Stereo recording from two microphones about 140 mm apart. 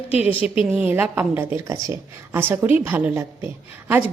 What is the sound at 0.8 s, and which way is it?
A woman's voice, 15° right (ahead or behind).